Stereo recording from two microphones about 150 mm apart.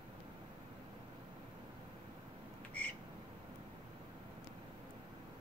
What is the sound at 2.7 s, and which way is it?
Squawk, 10° left (ahead or behind).